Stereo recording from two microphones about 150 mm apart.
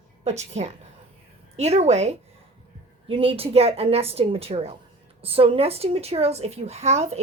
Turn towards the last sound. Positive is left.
turn(degrees=-45)  # may be behind; listen again after turning